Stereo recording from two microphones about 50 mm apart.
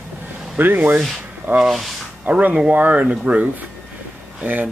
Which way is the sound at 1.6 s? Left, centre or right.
Centre.